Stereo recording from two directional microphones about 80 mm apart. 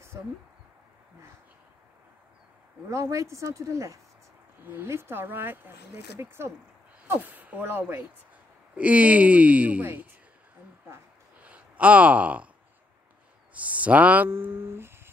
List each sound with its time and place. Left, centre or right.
0.1 s speech: right
2.9 s speech: right
4.6 s speech: right
7.1 s speech: right
11.4 s speech: centre
13.5 s a sound: centre
14.3 s speech: right